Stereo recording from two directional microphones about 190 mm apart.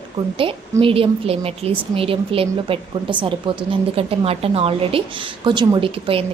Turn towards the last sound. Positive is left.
turn(degrees=-30)  # may be behind; listen again after turning